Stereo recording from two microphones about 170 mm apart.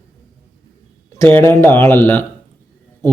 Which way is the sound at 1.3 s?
15° left (ahead or behind).